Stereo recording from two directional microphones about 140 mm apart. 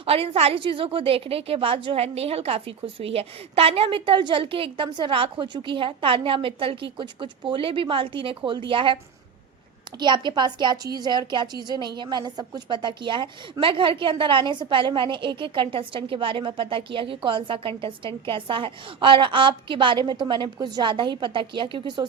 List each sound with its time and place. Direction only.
0.0 s a woman's voice: 45° right (ahead or behind)
10.0 s a woman's voice: 35° right (ahead or behind)